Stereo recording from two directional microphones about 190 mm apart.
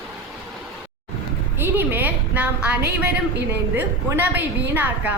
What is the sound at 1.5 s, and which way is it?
A woman's voice, 10° right (ahead or behind).